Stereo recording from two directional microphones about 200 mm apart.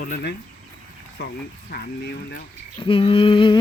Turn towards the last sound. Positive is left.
turn(degrees=25)  # may be behind; listen again after turning